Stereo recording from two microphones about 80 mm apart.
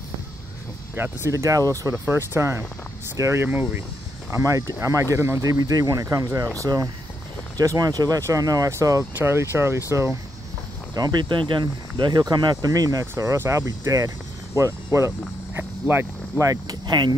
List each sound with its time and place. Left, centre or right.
0.9 s speech: right
1.3 s speech: right
2.0 s speech: right
4.3 s speech: right
5.5 s speech: right
9.1 s speech: right
11.0 s speech: right
13.0 s speech: right
16.4 s speech: right